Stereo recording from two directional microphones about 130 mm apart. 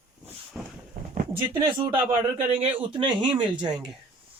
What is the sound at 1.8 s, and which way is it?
Speech, 40° right (ahead or behind).